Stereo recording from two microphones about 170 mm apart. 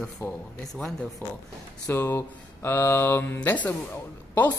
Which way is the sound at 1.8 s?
15° left (ahead or behind).